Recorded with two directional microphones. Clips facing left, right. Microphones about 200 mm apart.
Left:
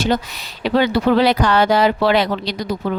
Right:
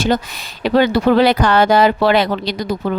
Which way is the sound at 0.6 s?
45° right (ahead or behind).